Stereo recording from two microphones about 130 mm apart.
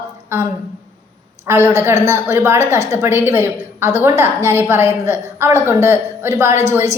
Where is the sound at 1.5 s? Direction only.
20° right (ahead or behind).